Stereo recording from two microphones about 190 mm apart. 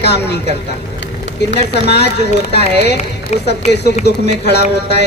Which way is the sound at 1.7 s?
60° left (ahead or behind).